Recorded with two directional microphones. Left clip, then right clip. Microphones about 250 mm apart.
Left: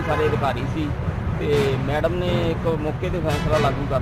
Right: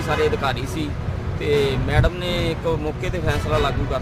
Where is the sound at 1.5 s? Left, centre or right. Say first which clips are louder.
Right 1 dB; centre.